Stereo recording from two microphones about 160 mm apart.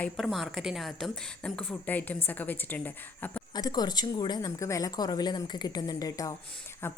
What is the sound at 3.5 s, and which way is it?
A woman's voice, 25° left (ahead or behind).